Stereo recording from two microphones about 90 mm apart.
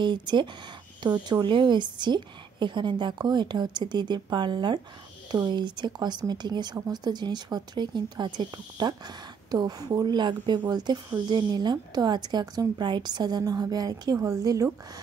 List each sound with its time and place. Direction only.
0.0 s a woman's voice: 60° right (ahead or behind); by 14.7 s 40° right (ahead or behind)